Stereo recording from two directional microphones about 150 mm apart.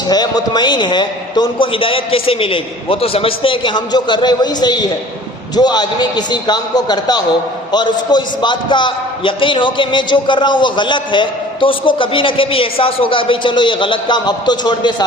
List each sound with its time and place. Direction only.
0.1 s a man's voice: 25° left (ahead or behind)